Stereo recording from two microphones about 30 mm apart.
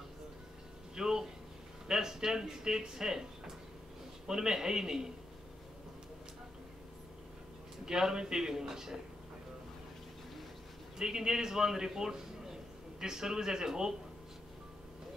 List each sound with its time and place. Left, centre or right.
0.9 s a sound: centre
1.9 s speech: centre
7.8 s speech: centre
11.0 s a man's voice: centre